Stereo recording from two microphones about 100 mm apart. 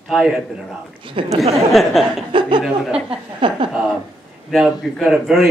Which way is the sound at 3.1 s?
60° right (ahead or behind).